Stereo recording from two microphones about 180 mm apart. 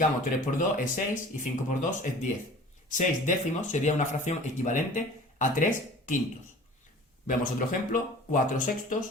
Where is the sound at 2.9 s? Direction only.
45° left (ahead or behind).